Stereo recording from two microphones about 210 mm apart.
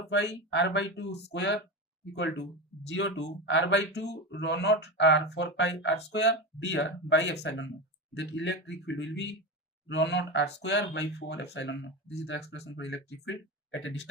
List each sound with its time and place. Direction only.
0.1 s speech: 55° left (ahead or behind)